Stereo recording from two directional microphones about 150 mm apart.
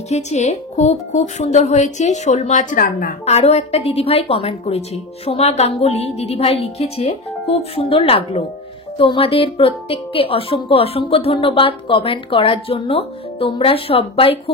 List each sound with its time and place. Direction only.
0.1 s speech: 50° left (ahead or behind); by 3.2 s 65° left (ahead or behind)
3.3 s speech: 45° left (ahead or behind)